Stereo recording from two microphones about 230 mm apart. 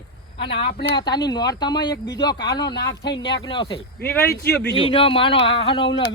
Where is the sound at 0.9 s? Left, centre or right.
Centre.